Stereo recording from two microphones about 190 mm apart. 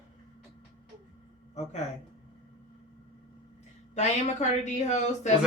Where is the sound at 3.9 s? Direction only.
40° left (ahead or behind).